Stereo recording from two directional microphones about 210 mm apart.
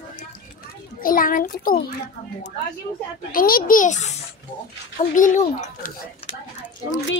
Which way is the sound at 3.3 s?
40° left (ahead or behind).